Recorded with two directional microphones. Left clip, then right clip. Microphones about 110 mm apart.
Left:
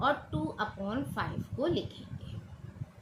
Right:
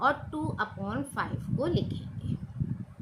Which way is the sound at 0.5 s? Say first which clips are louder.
Right 2 dB; 70° right (ahead or behind).